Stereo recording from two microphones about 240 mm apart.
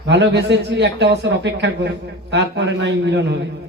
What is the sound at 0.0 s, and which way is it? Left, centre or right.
A man's voice, right.